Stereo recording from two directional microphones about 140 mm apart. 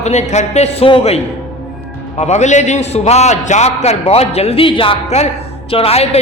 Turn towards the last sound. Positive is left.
turn(degrees=45)  # may be behind; listen again after turning